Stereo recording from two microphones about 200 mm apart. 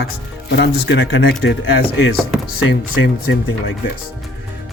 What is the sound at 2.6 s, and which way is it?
Speech, 65° left (ahead or behind).